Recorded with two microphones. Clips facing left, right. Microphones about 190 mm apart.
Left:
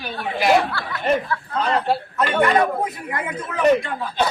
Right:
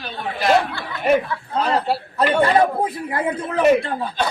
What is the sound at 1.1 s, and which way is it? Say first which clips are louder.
Speech: right 3 dB; 10° right (ahead or behind).